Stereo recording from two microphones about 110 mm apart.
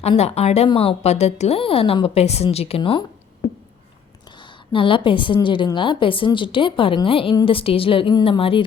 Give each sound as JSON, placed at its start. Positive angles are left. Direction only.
{"t": 0.2, "sound": "a woman's voice", "side_deg": 70}
{"t": 0.7, "sound": "a woman's voice", "side_deg": 60}
{"t": 4.3, "sound": "a woman's voice", "side_deg": 45}